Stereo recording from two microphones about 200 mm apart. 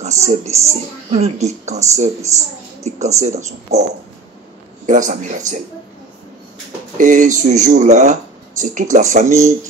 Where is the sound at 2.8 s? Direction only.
35° right (ahead or behind).